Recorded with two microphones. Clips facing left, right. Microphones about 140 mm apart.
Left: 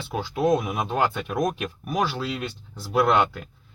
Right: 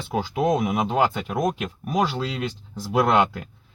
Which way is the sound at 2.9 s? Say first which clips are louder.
Right 1 dB; 20° right (ahead or behind).